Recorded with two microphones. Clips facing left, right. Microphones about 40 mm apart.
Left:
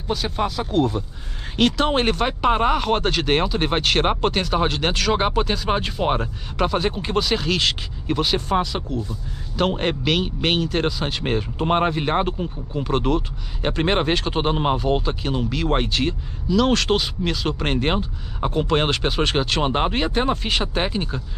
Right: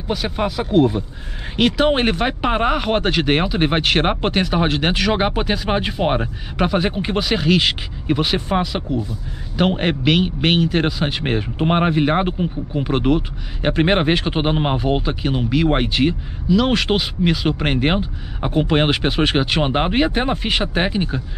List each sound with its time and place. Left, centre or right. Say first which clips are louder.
0.1 s a man's voice: right 2 dB; centre